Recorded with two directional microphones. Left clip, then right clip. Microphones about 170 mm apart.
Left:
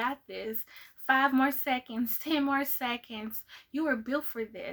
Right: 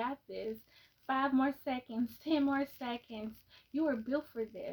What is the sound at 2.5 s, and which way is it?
A woman's voice, 20° left (ahead or behind).